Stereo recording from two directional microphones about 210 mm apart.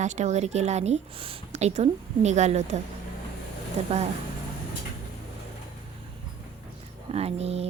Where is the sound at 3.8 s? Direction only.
30° right (ahead or behind).